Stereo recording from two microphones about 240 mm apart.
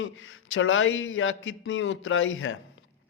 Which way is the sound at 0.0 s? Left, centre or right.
Left.